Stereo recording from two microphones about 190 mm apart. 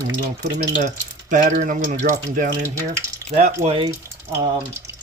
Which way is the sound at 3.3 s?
35° right (ahead or behind).